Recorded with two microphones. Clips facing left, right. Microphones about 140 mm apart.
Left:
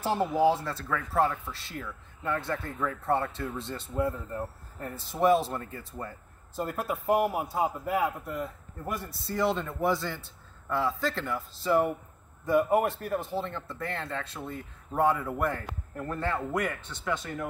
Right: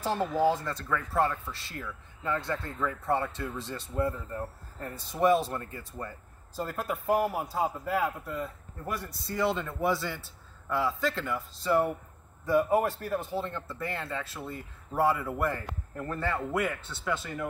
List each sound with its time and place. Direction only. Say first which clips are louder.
0.0 s speech: left 2 dB; 5° left (ahead or behind)
7.1 s speech: left 1 dB; 20° left (ahead or behind)
9.1 s speech: left 1 dB; centre (ahead or behind)